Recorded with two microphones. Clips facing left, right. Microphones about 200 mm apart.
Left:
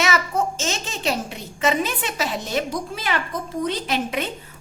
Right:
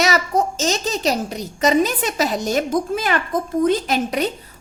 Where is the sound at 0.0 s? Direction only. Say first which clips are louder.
Right 3 dB; 40° right (ahead or behind).